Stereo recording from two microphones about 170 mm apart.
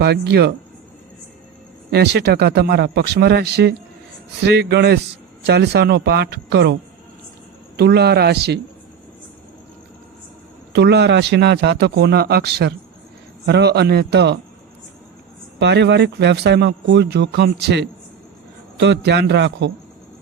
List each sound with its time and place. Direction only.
0.0 s speech: 75° right (ahead or behind)
1.9 s speech: 75° right (ahead or behind)
7.8 s speech: 70° right (ahead or behind)
10.7 s speech: 80° right
15.5 s speech: 90° right; by 17.8 s 75° right (ahead or behind)
18.8 s a man's voice: 90° right